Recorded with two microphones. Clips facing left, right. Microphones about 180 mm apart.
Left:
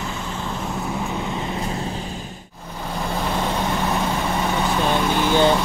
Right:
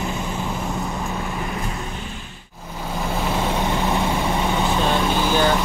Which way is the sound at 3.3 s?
5° right (ahead or behind).